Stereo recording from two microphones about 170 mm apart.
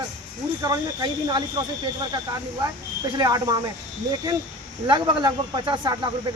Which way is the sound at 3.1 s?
25° right (ahead or behind).